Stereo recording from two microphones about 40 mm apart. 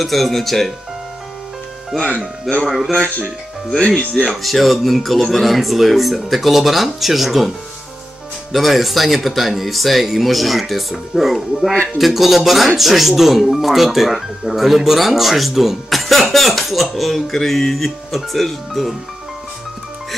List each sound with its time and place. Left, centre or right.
0.0 s speech: centre
1.9 s speech: centre
2.9 s speech: left
4.3 s speech: centre
8.5 s speech: centre